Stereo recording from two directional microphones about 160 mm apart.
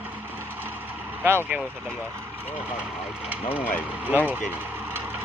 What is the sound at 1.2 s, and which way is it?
Speech, 15° right (ahead or behind).